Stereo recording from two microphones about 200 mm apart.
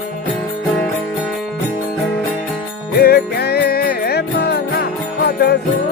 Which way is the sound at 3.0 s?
55° left (ahead or behind).